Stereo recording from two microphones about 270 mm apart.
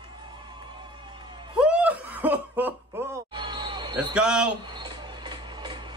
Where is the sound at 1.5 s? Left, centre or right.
Centre.